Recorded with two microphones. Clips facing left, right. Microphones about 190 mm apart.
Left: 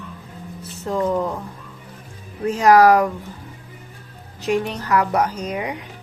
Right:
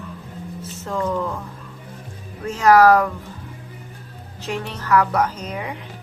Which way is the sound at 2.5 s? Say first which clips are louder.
Even; 15° left (ahead or behind).